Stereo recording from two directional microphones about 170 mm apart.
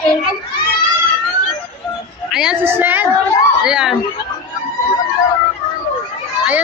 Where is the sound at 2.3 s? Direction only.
5° right (ahead or behind).